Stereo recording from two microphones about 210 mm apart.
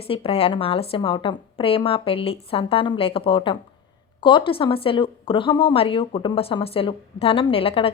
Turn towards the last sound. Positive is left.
turn(degrees=25)  # may be behind; listen again after turning